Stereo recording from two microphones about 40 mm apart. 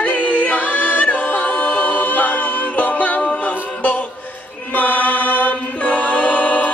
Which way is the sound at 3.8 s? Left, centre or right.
Left.